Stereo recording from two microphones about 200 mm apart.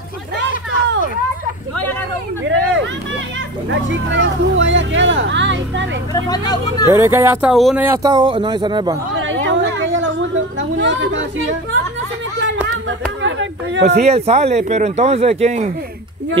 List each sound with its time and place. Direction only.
2.4 s hubbub: 65° right (ahead or behind)
3.7 s speech: 70° right (ahead or behind)
6.1 s speech: 20° left (ahead or behind)
6.9 s speech: 15° right (ahead or behind)
8.0 s speech: 20° right (ahead or behind)
9.2 s chatter: 70° right (ahead or behind)
10.8 s speech: 65° right (ahead or behind)
13.2 s speech: 70° right (ahead or behind)
13.8 s speech: 35° right (ahead or behind)